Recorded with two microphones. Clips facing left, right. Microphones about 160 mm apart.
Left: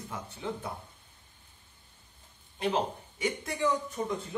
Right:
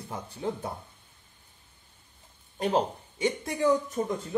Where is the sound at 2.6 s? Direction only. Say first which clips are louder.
Right 3 dB; 35° right (ahead or behind).